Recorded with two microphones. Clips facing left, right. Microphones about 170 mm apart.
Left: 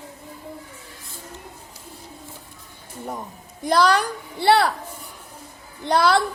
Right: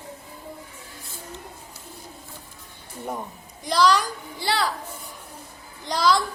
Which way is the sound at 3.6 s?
55° left (ahead or behind).